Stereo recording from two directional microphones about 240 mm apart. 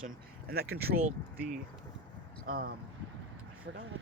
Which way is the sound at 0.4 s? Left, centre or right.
Right.